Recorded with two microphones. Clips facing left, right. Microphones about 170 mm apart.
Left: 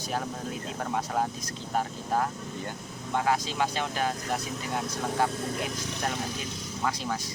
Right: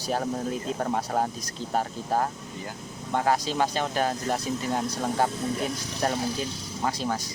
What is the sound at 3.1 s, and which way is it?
Speech, 40° right (ahead or behind).